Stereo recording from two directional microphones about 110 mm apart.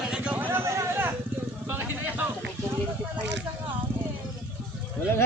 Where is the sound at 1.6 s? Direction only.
20° right (ahead or behind).